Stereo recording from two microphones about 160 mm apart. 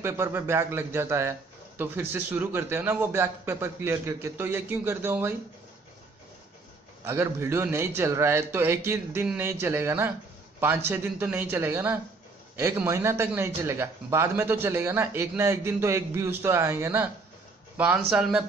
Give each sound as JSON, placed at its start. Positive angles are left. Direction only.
{"t": 0.0, "sound": "speech", "side_deg": -15}
{"t": 7.1, "sound": "speech", "side_deg": -15}